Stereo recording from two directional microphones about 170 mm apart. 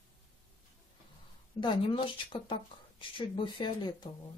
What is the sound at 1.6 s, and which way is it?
Speech, 30° left (ahead or behind).